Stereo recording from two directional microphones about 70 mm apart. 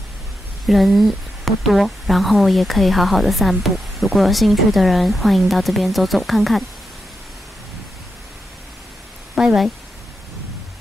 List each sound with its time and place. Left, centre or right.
0.7 s a woman's voice: centre
9.3 s speech: centre